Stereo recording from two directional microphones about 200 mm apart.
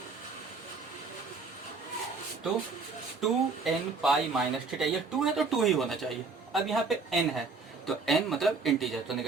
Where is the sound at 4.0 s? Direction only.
Centre (ahead or behind).